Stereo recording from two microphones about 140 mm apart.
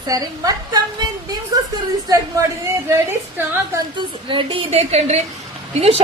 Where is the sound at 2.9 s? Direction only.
15° right (ahead or behind).